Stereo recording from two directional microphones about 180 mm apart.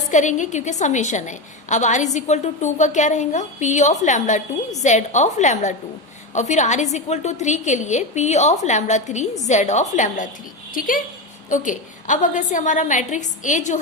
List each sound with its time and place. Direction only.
0.1 s a woman's voice: 45° left (ahead or behind)